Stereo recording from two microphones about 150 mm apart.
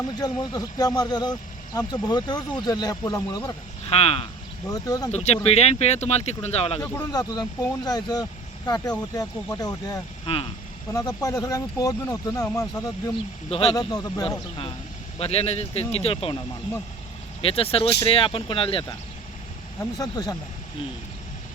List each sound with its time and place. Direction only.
0.2 s speech: 25° left (ahead or behind)
3.8 s speech: 40° left (ahead or behind)
4.7 s speech: 25° left (ahead or behind)
5.1 s speech: 45° left (ahead or behind)
7.1 s speech: 25° left (ahead or behind)
10.3 s speech: 40° left (ahead or behind)
10.9 s speech: 25° left (ahead or behind)
13.5 s speech: 40° left (ahead or behind)
13.7 s speech: 25° left (ahead or behind)
17.4 s speech: 40° left (ahead or behind)
19.8 s speech: 25° left (ahead or behind)